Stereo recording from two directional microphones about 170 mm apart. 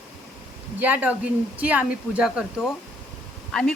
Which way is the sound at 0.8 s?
10° right (ahead or behind).